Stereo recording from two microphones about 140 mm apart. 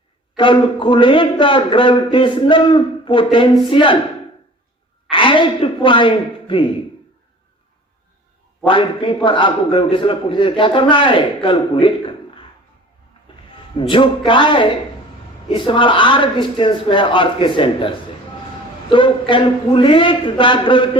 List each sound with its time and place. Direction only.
0.3 s a man's voice: 35° left (ahead or behind)
5.1 s speech: 35° left (ahead or behind)
8.6 s a man's voice: 40° left (ahead or behind)
13.7 s a man's voice: 35° left (ahead or behind)